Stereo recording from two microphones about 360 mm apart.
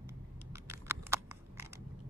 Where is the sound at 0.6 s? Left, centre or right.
Centre.